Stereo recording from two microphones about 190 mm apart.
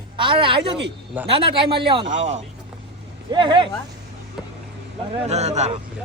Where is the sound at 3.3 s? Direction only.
25° right (ahead or behind).